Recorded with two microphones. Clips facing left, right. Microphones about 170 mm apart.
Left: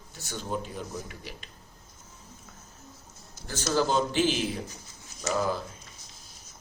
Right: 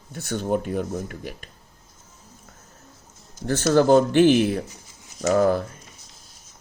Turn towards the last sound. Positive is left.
turn(degrees=-60)  # may be behind; listen again after turning